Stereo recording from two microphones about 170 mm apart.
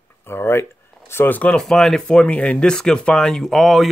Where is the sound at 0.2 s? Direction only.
15° left (ahead or behind).